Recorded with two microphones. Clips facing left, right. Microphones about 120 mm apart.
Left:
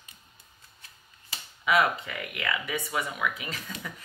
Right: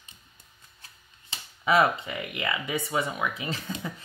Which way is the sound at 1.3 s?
30° right (ahead or behind).